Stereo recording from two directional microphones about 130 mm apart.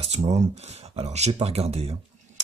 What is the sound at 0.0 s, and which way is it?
Speech, 55° right (ahead or behind).